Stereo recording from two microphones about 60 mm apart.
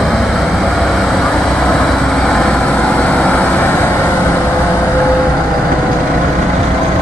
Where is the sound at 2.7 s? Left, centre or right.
Left.